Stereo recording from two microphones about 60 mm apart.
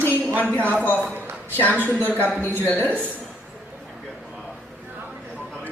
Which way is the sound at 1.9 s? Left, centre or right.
Right.